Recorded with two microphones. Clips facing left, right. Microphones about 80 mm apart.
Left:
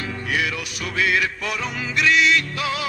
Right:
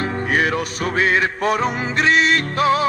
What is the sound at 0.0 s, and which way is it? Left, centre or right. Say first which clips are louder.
Music: right 6 dB; right.